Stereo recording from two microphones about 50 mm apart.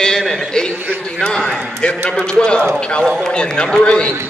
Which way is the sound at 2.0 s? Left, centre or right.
Centre.